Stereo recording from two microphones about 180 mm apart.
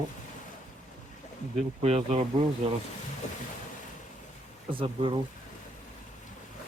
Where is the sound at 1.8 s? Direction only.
35° right (ahead or behind).